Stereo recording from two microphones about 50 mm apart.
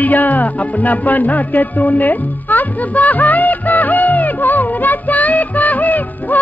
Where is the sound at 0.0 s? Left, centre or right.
Left.